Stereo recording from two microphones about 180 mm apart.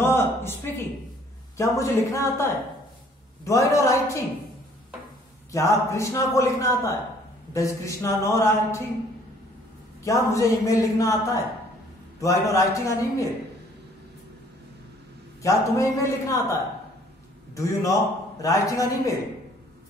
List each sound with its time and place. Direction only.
0.0 s a man's voice: 15° left (ahead or behind)
5.5 s a man's voice: 15° left (ahead or behind)
10.0 s a man's voice: 15° left (ahead or behind)
12.2 s a man's voice: 15° left (ahead or behind)
15.4 s a man's voice: 15° left (ahead or behind)
17.6 s a man's voice: 15° left (ahead or behind)